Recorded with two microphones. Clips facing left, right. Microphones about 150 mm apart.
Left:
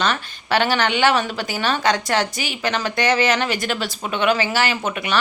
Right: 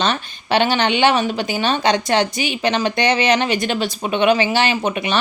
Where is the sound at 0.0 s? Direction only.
20° right (ahead or behind).